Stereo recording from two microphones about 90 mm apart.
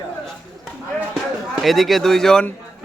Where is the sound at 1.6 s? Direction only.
Centre (ahead or behind).